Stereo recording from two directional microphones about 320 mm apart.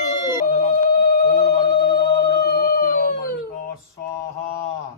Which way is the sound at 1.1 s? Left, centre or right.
Left.